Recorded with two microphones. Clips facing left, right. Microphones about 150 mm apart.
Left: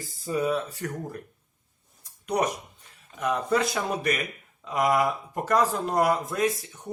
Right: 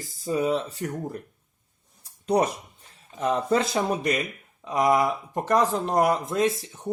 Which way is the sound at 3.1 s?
30° right (ahead or behind).